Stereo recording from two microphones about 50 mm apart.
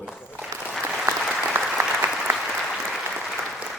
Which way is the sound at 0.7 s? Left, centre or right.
Centre.